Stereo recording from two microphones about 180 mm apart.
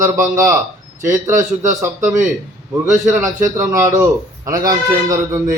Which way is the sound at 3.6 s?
15° right (ahead or behind).